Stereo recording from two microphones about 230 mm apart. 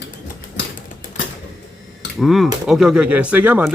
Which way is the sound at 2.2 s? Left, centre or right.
Centre.